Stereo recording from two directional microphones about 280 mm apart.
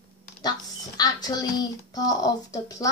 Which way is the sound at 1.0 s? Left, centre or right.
Centre.